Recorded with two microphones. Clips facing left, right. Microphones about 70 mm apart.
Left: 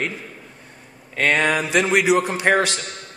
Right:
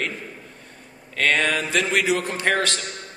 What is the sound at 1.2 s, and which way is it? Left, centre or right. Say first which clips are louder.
A man's voice: left 2 dB; centre.